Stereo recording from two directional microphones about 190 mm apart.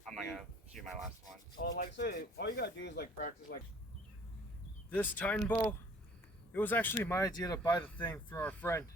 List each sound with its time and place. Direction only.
0.1 s a sound: centre (ahead or behind)
1.6 s speech: 60° left (ahead or behind)
3.2 s speech: 45° left (ahead or behind)
4.9 s speech: 10° left (ahead or behind)
7.8 s speech: 10° left (ahead or behind)